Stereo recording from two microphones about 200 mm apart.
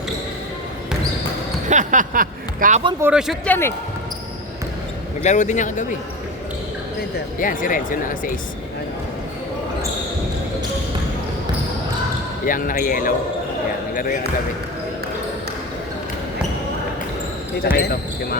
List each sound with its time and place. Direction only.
1.7 s speech: 40° right (ahead or behind)
3.0 s speech: 5° right (ahead or behind)
3.5 s speech: 10° left (ahead or behind)
5.2 s a man's voice: 35° left (ahead or behind)
7.3 s speech: 40° left (ahead or behind)
12.5 s speech: 45° left (ahead or behind)
17.7 s speech: 50° left (ahead or behind)